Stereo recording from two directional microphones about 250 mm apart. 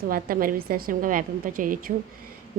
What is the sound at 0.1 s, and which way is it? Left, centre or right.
Speech, right.